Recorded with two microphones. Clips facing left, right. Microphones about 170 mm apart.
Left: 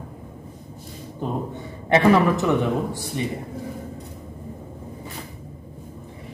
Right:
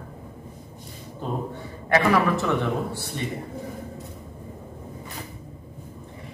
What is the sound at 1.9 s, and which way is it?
A man's voice, 25° left (ahead or behind).